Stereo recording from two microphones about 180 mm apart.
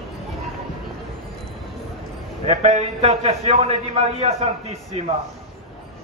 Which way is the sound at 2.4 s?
40° right (ahead or behind).